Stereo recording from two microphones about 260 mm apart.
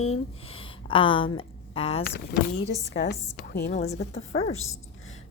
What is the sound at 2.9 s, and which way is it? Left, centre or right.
A woman's voice, left.